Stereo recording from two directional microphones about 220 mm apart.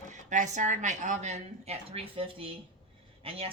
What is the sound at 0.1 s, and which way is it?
Speech, 35° right (ahead or behind).